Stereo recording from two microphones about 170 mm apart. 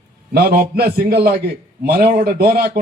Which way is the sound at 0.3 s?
65° right (ahead or behind).